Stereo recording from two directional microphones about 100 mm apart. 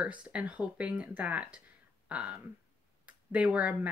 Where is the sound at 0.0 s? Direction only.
10° right (ahead or behind).